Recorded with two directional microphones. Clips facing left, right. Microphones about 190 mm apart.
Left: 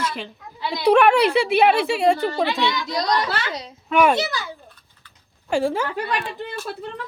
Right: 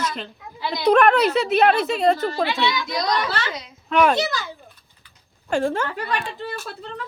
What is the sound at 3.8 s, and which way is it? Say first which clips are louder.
Speech: even; 5° left (ahead or behind).